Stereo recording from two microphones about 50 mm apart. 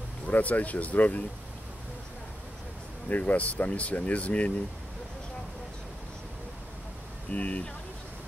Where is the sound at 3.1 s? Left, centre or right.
Left.